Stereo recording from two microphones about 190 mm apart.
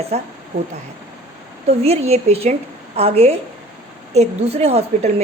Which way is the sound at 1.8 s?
35° right (ahead or behind).